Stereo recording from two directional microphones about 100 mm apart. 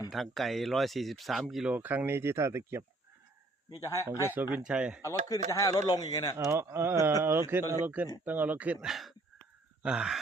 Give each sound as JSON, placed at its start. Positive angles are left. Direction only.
{"t": 0.1, "sound": "speech", "side_deg": 0}
{"t": 1.7, "sound": "speech", "side_deg": -15}
{"t": 3.8, "sound": "a man's voice", "side_deg": 30}
{"t": 4.3, "sound": "speech", "side_deg": -20}
{"t": 4.6, "sound": "speech", "side_deg": -10}
{"t": 5.0, "sound": "a man's voice", "side_deg": 35}
{"t": 6.4, "sound": "speech", "side_deg": -25}